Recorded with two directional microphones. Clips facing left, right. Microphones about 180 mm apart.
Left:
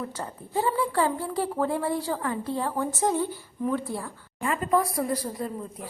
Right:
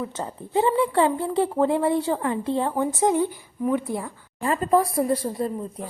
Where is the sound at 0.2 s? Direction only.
20° right (ahead or behind).